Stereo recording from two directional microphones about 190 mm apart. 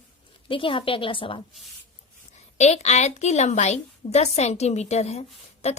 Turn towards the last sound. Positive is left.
turn(degrees=35)  # may be behind; listen again after turning